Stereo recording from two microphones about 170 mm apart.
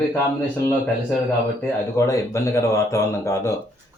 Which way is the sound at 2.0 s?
15° left (ahead or behind).